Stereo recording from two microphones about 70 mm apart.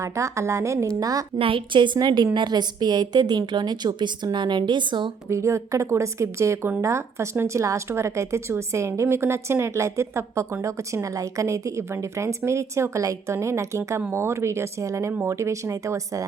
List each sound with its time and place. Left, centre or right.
0.0 s speech: right
2.0 s a woman's voice: right
5.3 s speech: right